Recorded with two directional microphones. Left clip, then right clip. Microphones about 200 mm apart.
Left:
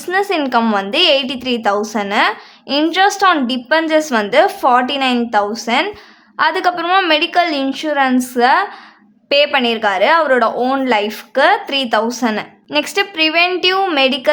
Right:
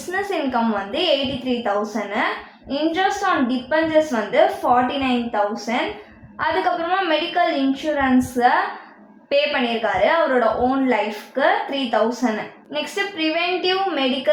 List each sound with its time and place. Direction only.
0.1 s a woman's voice: 45° left (ahead or behind)